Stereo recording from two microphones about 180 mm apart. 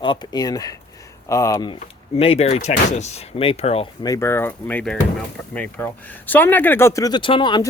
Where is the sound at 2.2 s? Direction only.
35° left (ahead or behind).